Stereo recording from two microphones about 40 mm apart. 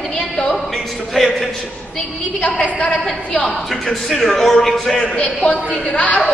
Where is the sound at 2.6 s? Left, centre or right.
Left.